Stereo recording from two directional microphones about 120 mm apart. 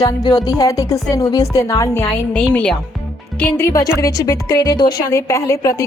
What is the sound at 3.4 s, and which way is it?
A woman's voice, 20° left (ahead or behind).